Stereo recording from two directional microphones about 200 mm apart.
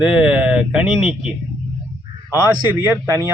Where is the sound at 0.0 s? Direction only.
5° right (ahead or behind).